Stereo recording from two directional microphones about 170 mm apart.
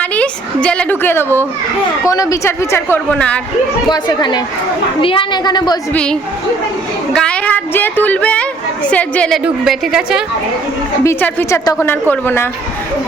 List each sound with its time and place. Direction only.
0.0 s a woman's voice: 10° left (ahead or behind)
3.8 s a woman's voice: 25° left (ahead or behind)
5.9 s a woman's voice: 5° left (ahead or behind)
11.0 s a woman's voice: 15° left (ahead or behind)